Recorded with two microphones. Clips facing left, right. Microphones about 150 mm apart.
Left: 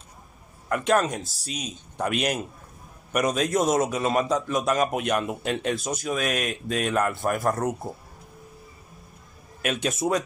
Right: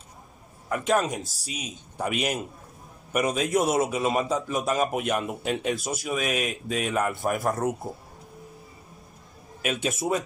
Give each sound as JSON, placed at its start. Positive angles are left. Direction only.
{"t": 0.7, "sound": "a man's voice", "side_deg": 0}
{"t": 9.6, "sound": "speech", "side_deg": -5}